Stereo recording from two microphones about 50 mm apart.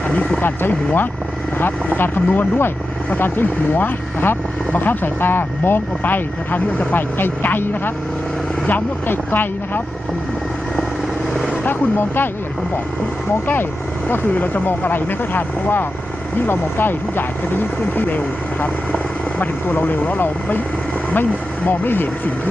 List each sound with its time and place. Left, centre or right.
0.1 s speech: centre
0.4 s speech: left
11.6 s speech: left
14.1 s speech: left
19.4 s speech: left